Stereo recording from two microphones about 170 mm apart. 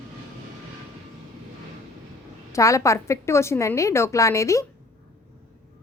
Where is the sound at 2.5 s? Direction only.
20° left (ahead or behind).